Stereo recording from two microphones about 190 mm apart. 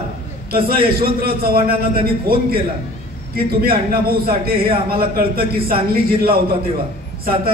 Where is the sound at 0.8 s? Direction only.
50° right (ahead or behind).